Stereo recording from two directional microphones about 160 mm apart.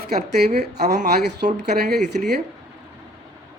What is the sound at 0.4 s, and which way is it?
A man's voice, 90° right.